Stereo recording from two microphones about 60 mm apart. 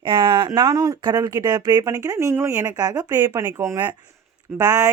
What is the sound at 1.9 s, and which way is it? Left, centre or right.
Speech, right.